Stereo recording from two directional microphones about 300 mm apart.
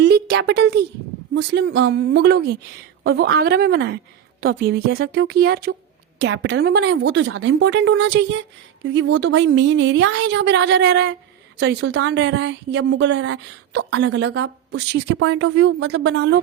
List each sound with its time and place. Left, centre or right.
0.0 s a woman's voice: right